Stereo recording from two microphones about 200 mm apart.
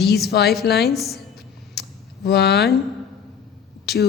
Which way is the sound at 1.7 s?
55° left (ahead or behind).